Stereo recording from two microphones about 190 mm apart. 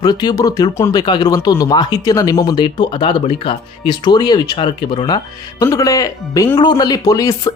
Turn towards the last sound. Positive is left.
turn(degrees=20)  # may be behind; listen again after turning